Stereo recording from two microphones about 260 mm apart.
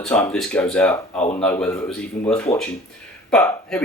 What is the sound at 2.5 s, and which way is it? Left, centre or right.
Speech, centre.